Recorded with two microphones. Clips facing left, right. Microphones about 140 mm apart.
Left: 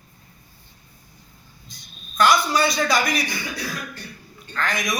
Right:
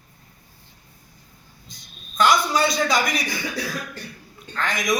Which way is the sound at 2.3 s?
Centre (ahead or behind).